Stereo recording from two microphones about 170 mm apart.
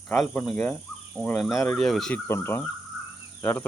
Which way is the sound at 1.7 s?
Centre (ahead or behind).